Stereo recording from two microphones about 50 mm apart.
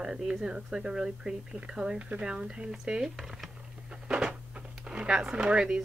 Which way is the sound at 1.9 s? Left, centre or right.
Right.